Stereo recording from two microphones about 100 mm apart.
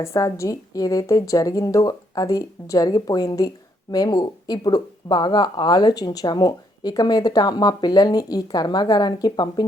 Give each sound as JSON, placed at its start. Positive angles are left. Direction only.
{"t": 0.0, "sound": "a woman's voice", "side_deg": 30}